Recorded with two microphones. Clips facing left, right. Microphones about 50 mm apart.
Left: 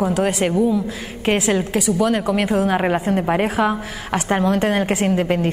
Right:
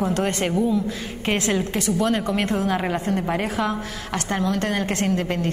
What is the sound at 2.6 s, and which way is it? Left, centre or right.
A woman's voice, left.